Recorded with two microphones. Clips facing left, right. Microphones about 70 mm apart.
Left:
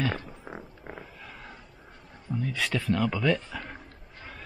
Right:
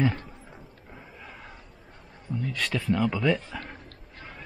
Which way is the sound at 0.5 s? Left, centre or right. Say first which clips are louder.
Left 7 dB; left.